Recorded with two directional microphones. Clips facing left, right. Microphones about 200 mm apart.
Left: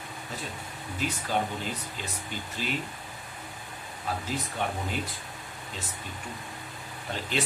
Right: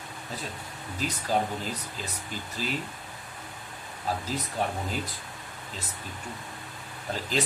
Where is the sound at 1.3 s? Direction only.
40° right (ahead or behind).